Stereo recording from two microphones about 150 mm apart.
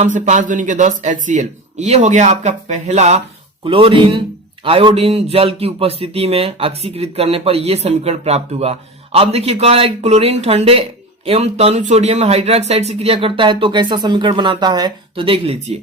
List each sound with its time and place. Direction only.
0.0 s a man's voice: 55° right (ahead or behind)
3.6 s speech: 35° right (ahead or behind)